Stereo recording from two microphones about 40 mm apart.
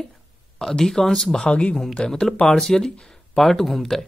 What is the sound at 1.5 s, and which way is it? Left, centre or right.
Speech, left.